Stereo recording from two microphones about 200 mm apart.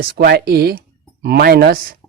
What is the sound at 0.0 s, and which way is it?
Speech, 50° right (ahead or behind).